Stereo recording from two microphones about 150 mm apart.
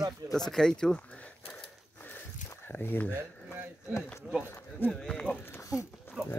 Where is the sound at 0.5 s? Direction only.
5° left (ahead or behind).